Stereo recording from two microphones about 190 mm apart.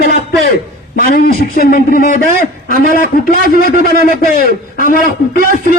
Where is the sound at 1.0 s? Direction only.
50° left (ahead or behind).